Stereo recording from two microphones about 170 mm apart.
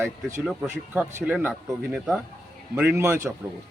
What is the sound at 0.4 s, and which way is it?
Speech, 5° right (ahead or behind).